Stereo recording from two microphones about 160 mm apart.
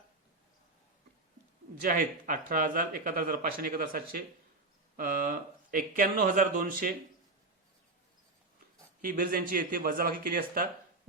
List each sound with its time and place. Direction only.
1.8 s speech: 60° right (ahead or behind)
9.0 s speech: 60° right (ahead or behind)